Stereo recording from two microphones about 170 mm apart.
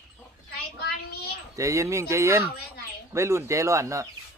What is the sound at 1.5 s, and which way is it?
Speech, 20° right (ahead or behind).